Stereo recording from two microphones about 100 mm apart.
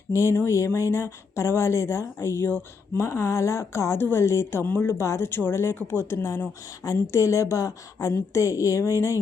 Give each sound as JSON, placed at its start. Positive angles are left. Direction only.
{"t": 0.1, "sound": "a woman's voice", "side_deg": 30}